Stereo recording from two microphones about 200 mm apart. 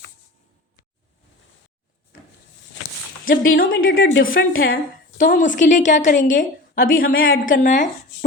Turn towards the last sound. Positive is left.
turn(degrees=40)  # may be behind; listen again after turning